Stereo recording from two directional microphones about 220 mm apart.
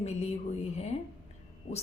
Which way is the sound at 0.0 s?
30° left (ahead or behind).